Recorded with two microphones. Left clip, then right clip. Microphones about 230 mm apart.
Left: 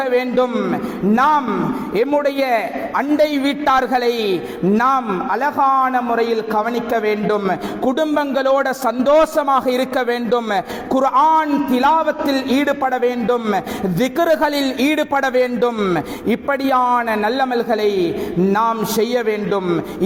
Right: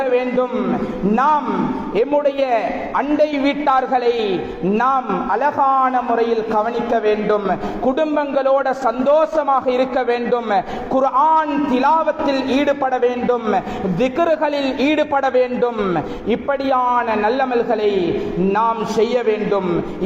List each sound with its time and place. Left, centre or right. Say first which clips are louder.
1.1 s a man's voice: left 1 dB; left